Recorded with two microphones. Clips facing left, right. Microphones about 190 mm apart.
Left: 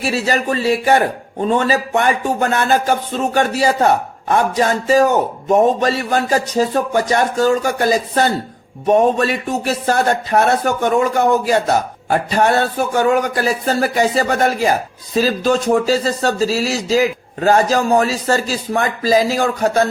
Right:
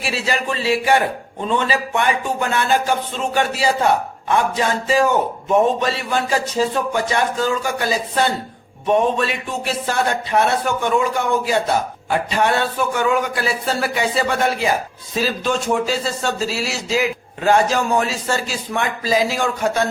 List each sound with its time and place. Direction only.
0.0 s music: 40° left (ahead or behind)
15.1 s speech: 40° left (ahead or behind)